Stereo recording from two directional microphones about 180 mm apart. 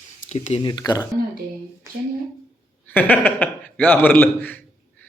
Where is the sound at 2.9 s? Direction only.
10° left (ahead or behind).